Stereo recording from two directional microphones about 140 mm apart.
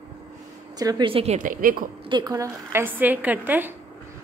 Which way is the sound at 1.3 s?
75° right (ahead or behind).